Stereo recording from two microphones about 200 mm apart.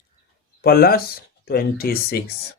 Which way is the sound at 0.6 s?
50° left (ahead or behind).